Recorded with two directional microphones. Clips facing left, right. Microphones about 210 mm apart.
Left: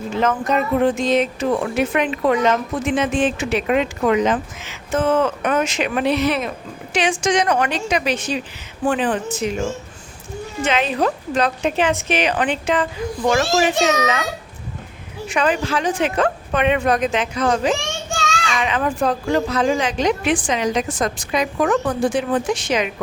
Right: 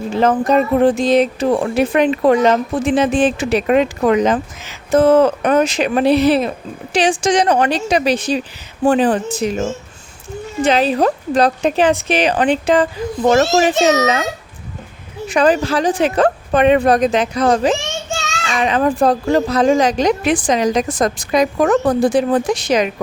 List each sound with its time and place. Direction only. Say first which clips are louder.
0.2 s speech: right 6 dB; 35° right (ahead or behind)
15.3 s speech: right 6 dB; 35° right (ahead or behind)